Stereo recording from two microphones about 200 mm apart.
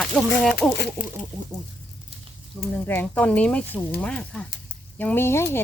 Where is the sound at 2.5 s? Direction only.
Centre (ahead or behind).